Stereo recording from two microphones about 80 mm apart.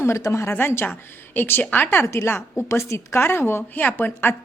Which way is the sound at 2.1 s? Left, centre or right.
Left.